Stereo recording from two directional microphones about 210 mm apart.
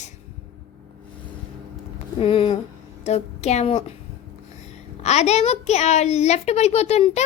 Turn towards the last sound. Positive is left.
turn(degrees=30)  # may be behind; listen again after turning